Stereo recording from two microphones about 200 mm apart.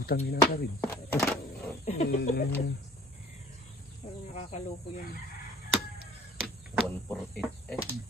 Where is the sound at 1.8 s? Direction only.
35° left (ahead or behind).